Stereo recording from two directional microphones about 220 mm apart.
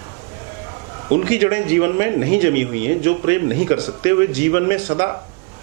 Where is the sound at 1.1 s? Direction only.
15° right (ahead or behind).